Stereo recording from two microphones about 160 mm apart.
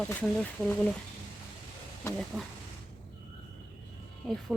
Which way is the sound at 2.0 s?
15° left (ahead or behind).